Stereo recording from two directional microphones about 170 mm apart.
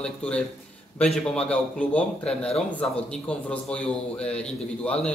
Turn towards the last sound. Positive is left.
turn(degrees=5)  # may be behind; listen again after turning